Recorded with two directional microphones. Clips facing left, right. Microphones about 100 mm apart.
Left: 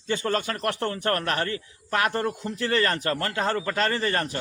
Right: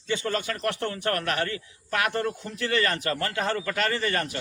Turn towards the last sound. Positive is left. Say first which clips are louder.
# left 1 dB
turn(degrees=35)  # may be behind; listen again after turning